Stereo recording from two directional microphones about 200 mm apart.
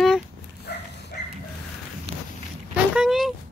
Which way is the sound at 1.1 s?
40° left (ahead or behind).